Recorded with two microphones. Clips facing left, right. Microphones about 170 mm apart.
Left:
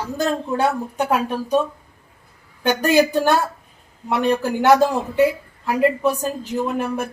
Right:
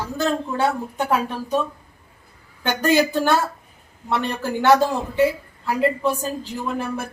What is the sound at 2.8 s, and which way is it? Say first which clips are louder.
A woman's voice: left 1 dB; 10° left (ahead or behind).